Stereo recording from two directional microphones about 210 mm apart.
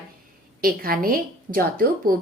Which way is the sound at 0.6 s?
45° right (ahead or behind).